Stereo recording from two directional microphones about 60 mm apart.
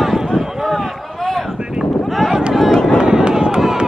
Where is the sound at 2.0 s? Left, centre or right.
Centre.